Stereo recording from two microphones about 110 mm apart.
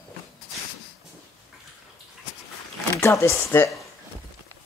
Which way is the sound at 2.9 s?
25° left (ahead or behind).